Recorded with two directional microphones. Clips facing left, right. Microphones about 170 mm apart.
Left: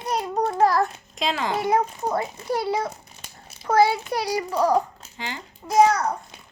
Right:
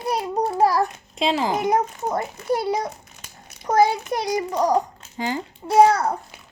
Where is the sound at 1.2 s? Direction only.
30° right (ahead or behind).